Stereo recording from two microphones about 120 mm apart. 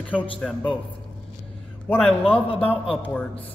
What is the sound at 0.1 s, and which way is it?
Speech, 10° left (ahead or behind).